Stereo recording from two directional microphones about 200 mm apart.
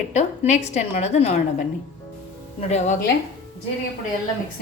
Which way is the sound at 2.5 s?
30° left (ahead or behind).